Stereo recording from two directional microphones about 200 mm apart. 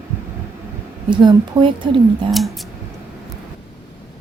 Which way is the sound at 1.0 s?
25° right (ahead or behind).